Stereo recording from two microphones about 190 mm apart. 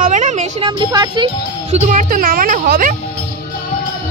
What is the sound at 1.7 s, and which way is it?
Speech, 40° right (ahead or behind).